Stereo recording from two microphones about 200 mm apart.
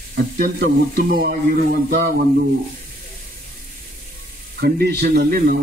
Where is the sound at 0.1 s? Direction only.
50° right (ahead or behind).